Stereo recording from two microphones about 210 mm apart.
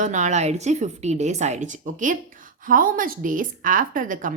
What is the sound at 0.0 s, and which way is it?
A woman's voice, 35° right (ahead or behind).